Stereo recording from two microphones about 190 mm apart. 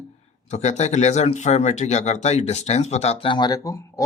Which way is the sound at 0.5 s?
35° left (ahead or behind).